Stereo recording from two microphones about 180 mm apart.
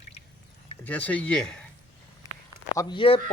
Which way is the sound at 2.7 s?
25° left (ahead or behind).